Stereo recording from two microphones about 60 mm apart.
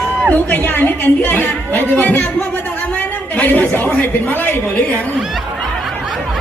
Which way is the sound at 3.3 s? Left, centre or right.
Left.